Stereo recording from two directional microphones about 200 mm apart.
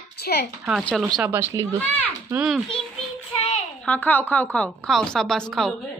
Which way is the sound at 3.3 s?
30° left (ahead or behind).